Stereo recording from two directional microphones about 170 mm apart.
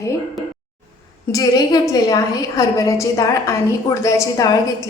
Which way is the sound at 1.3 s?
20° left (ahead or behind).